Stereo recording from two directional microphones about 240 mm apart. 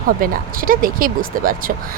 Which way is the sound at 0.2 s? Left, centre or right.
Right.